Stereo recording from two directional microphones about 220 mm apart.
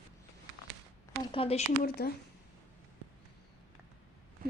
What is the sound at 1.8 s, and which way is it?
Speech, 45° left (ahead or behind).